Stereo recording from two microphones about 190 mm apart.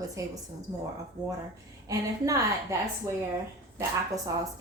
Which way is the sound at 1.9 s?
15° right (ahead or behind).